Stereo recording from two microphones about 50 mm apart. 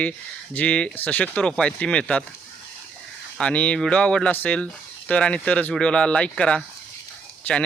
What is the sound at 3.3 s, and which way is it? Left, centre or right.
Speech, left.